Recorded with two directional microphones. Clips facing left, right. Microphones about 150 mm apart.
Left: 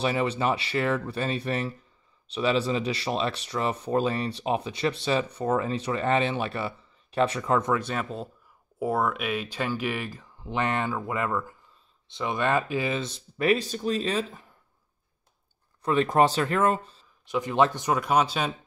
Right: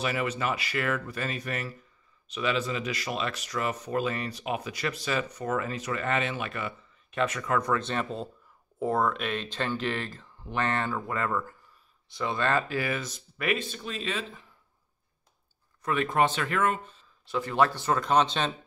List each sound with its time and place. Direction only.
0.0 s speech: 30° left (ahead or behind)
7.7 s speech: 10° left (ahead or behind); by 14.4 s 40° left (ahead or behind)
15.8 s speech: 30° left (ahead or behind)
17.2 s speech: 15° left (ahead or behind)